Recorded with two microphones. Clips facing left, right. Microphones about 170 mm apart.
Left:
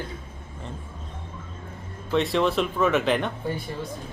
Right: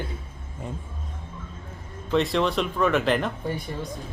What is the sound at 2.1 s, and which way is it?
A man's voice, centre (ahead or behind).